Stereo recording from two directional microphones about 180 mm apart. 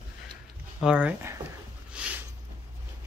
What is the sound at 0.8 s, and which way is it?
Speech, 5° right (ahead or behind).